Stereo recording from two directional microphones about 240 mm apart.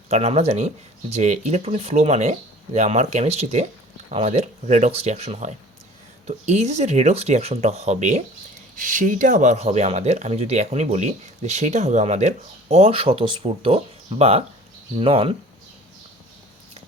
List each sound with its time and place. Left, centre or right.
0.1 s speech: right